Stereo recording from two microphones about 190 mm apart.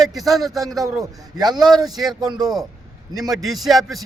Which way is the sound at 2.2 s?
20° right (ahead or behind).